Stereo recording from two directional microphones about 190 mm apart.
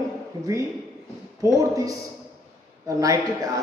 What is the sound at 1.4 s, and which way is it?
Speech, 15° right (ahead or behind).